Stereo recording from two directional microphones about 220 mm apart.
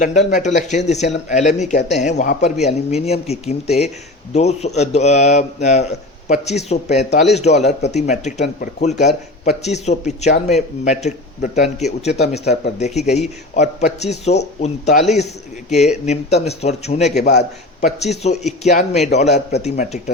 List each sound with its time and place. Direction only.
0.0 s a man's voice: 35° left (ahead or behind)